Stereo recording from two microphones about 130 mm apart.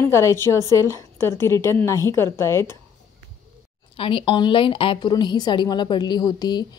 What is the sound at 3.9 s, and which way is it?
A woman's voice, 45° left (ahead or behind).